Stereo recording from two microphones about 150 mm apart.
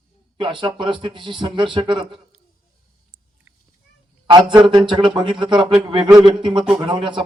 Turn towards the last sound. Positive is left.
turn(degrees=-35)  # may be behind; listen again after turning